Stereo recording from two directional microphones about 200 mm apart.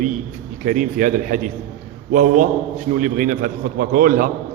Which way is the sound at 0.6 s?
40° right (ahead or behind).